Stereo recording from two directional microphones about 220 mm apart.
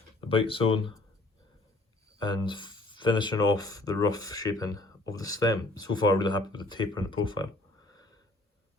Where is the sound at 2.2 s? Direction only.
20° left (ahead or behind).